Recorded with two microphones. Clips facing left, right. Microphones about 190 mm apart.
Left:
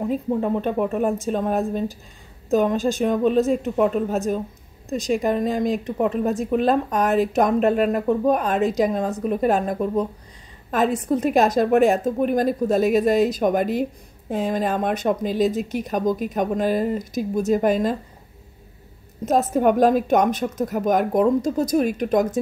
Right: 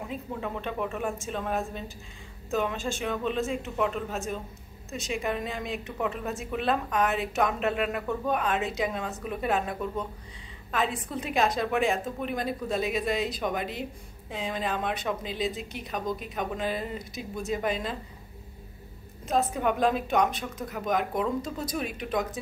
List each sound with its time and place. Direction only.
0.0 s speech: 40° left (ahead or behind)
19.2 s speech: 45° left (ahead or behind)